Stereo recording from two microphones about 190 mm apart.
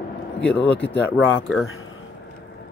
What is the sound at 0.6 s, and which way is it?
Speech, 5° left (ahead or behind).